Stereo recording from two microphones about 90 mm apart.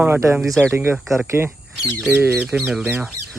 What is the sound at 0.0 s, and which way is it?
Speech, 30° right (ahead or behind).